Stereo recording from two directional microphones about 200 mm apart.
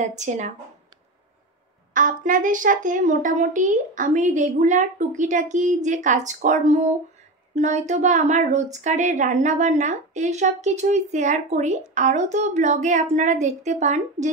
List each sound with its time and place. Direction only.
0.1 s a woman's voice: 35° right (ahead or behind)
2.0 s a woman's voice: 40° right (ahead or behind)